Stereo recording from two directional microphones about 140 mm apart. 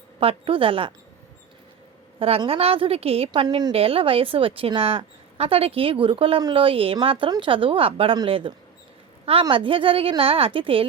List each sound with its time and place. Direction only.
0.2 s a woman's voice: 45° right (ahead or behind)
2.1 s a woman's voice: 45° right (ahead or behind)
3.4 s a woman's voice: 30° right (ahead or behind)
3.7 s a woman's voice: 45° right (ahead or behind)